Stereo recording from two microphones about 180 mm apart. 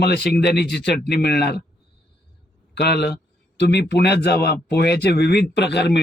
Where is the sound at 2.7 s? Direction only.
65° left (ahead or behind).